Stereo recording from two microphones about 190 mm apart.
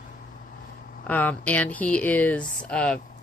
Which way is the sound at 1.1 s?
10° left (ahead or behind).